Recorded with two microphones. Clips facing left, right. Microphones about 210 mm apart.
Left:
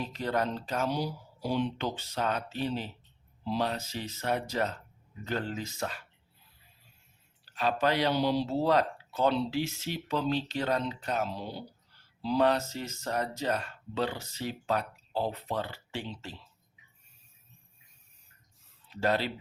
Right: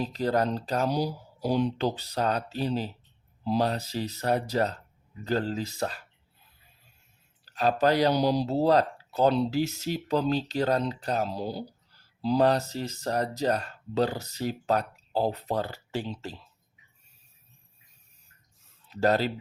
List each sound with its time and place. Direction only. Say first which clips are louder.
0.0 s speech: right 5 dB; 35° right (ahead or behind)
7.4 s speech: right 4 dB; 40° right (ahead or behind)
18.9 s speech: right 5 dB; 40° right (ahead or behind)